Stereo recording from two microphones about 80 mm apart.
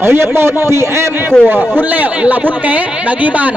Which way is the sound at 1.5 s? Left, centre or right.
Right.